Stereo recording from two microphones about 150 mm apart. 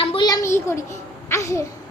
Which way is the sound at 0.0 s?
40° left (ahead or behind).